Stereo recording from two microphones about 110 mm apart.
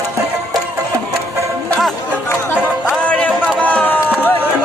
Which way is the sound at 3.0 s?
15° left (ahead or behind).